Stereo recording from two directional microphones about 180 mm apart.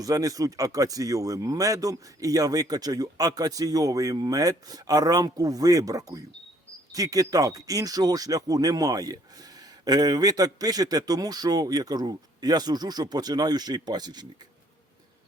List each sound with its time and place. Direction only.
0.0 s speech: 20° right (ahead or behind)